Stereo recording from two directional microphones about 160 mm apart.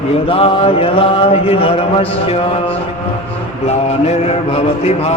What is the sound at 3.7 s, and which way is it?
Mantra, 45° left (ahead or behind).